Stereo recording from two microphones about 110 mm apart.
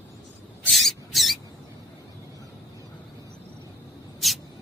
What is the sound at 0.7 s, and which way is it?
Mouse, centre (ahead or behind).